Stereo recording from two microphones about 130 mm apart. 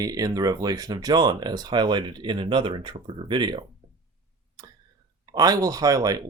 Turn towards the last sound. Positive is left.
turn(degrees=-25)  # may be behind; listen again after turning